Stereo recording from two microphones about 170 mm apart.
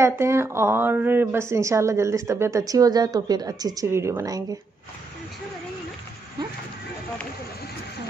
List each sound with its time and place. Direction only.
0.0 s a woman's voice: 15° right (ahead or behind)